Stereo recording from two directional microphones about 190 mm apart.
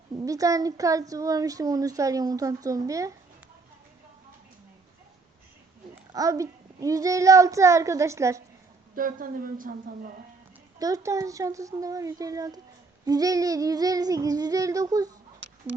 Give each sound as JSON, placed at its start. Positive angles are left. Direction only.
{"t": 0.3, "sound": "speech", "side_deg": -20}
{"t": 6.1, "sound": "speech", "side_deg": -15}
{"t": 9.0, "sound": "speech", "side_deg": -45}
{"t": 10.8, "sound": "speech", "side_deg": -20}
{"t": 13.1, "sound": "child singing", "side_deg": -20}